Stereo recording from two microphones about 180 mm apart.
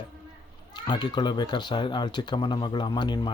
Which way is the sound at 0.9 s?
25° left (ahead or behind).